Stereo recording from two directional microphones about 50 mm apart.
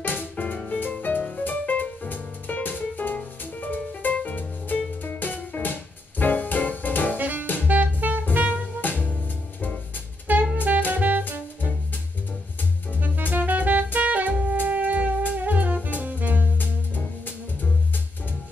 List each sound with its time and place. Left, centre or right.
0.0 s music: left
7.2 s saxophone: right
7.6 s music: right
8.8 s music: left
10.4 s music: right
13.0 s music: right
13.9 s saxophone: right
14.3 s music: right
14.6 s music: right